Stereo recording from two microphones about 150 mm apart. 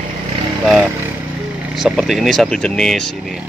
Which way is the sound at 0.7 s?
5° right (ahead or behind).